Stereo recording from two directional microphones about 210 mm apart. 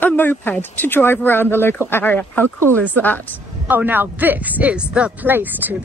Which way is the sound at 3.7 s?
10° right (ahead or behind).